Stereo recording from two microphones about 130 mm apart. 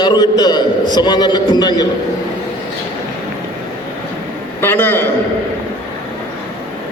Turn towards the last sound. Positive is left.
turn(degrees=15)  # may be behind; listen again after turning